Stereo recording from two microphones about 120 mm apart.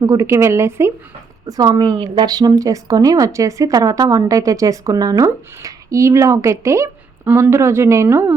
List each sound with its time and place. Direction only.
0.0 s speech: 25° right (ahead or behind)